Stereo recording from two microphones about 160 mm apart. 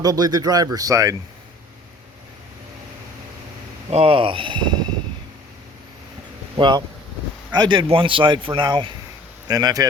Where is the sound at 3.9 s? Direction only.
35° right (ahead or behind).